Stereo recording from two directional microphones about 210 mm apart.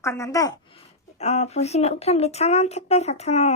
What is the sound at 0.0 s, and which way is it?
Speech, 15° left (ahead or behind).